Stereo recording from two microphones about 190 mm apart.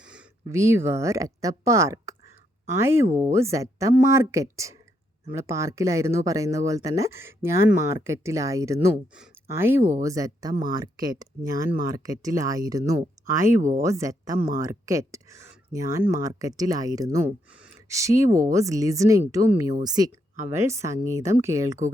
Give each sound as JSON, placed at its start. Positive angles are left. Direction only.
{"t": 0.0, "sound": "a sound", "side_deg": -5}
{"t": 0.4, "sound": "speech", "side_deg": -15}
{"t": 3.1, "sound": "speech", "side_deg": -35}
{"t": 3.3, "sound": "speech", "side_deg": -15}
{"t": 13.6, "sound": "speech", "side_deg": -40}
{"t": 13.8, "sound": "speech", "side_deg": -15}